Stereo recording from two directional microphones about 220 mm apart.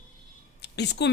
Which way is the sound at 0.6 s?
50° left (ahead or behind).